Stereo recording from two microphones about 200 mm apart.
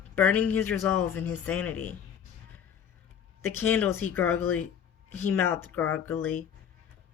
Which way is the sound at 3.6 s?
10° left (ahead or behind).